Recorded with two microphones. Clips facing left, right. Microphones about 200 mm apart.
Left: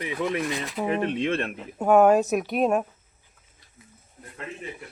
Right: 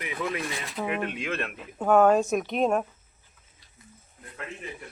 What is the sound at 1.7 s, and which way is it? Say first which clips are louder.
Speech: left 2 dB; 10° left (ahead or behind).